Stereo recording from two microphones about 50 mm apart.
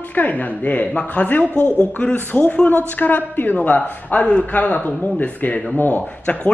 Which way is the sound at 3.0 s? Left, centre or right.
Left.